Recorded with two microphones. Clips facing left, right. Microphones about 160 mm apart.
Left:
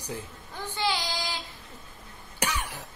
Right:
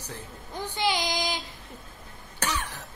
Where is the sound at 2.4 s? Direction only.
10° left (ahead or behind).